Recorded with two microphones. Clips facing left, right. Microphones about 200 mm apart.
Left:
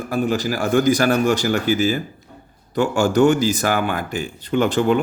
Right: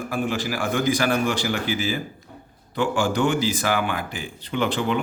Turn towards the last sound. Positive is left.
turn(degrees=45)  # may be behind; listen again after turning